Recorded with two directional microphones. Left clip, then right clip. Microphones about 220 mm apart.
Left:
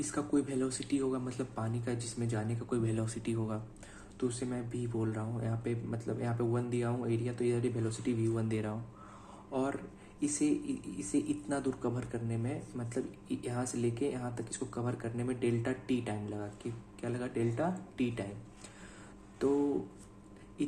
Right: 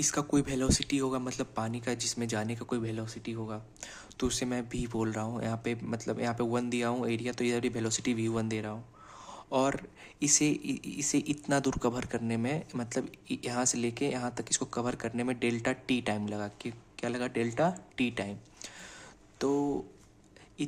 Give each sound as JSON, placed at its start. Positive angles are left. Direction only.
{"t": 0.0, "sound": "speech", "side_deg": -30}
{"t": 3.8, "sound": "speech", "side_deg": -35}
{"t": 9.5, "sound": "speech", "side_deg": -35}